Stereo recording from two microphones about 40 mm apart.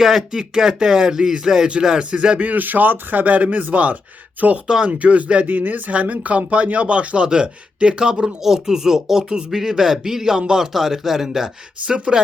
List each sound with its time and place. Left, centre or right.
0.0 s speech: centre
2.1 s speech: right
2.5 s speech: right
5.5 s speech: right
5.9 s speech: right; by 11.4 s centre
11.9 s speech: right